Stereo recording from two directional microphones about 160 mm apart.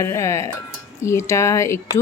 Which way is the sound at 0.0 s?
20° left (ahead or behind).